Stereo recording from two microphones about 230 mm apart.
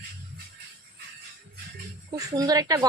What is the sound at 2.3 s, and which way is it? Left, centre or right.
Speech, centre.